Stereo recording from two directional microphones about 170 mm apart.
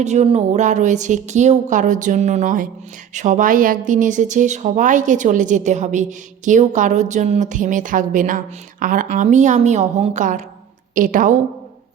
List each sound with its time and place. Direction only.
0.0 s speech: 40° right (ahead or behind)